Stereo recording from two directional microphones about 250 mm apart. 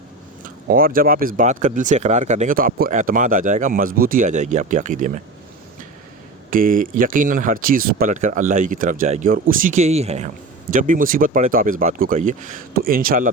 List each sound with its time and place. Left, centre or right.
0.4 s speech: right
6.5 s speech: right